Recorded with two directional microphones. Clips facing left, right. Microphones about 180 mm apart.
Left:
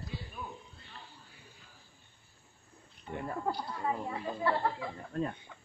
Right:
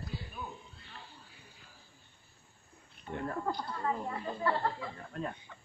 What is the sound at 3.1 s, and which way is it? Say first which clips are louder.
Speech: even; 10° left (ahead or behind).